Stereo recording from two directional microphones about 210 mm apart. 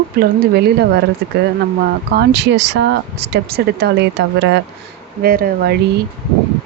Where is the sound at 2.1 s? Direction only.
50° right (ahead or behind).